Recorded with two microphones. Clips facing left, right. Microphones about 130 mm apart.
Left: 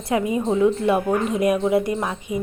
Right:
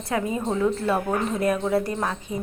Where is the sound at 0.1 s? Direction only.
15° left (ahead or behind).